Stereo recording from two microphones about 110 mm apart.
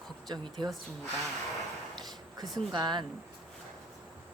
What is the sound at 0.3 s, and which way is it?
Speech, 40° right (ahead or behind).